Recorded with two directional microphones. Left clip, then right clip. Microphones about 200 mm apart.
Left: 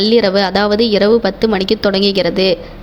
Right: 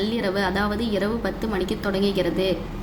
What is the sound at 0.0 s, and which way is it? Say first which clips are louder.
A woman's voice: left 12 dB; 40° left (ahead or behind).